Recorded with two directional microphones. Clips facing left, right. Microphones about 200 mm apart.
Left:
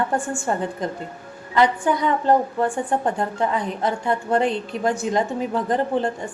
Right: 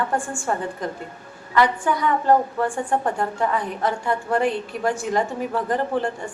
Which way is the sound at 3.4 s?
20° left (ahead or behind).